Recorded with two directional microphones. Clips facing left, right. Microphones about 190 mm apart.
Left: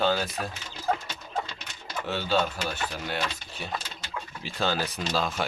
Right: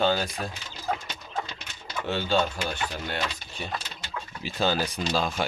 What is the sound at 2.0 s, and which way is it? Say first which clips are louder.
Speech: right 1 dB; 5° left (ahead or behind).